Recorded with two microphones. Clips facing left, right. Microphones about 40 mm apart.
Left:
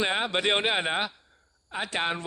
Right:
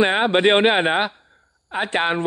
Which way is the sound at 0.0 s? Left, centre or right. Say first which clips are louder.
Right 10 dB; right.